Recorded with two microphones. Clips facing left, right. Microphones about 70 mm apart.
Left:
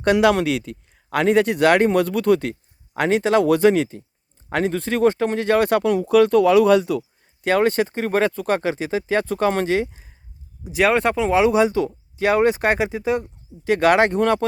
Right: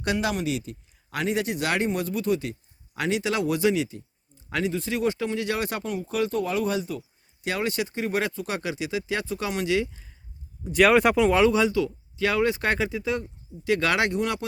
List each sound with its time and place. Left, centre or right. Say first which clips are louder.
0.0 s speech: left 10 dB; left
7.4 s speech: left 9 dB; left
9.7 s speech: left 4 dB; left
10.6 s speech: even; centre
11.2 s speech: left 2 dB; centre
11.4 s speech: left 4 dB; left